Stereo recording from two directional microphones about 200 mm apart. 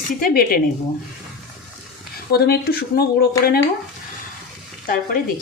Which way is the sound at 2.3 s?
50° left (ahead or behind).